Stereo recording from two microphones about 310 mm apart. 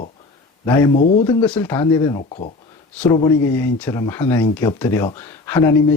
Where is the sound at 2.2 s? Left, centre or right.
Left.